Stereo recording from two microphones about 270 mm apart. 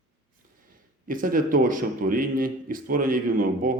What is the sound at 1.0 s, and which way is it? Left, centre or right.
A man's voice, right.